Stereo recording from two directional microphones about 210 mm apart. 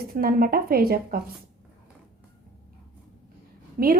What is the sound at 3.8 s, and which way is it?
Speech, 45° right (ahead or behind).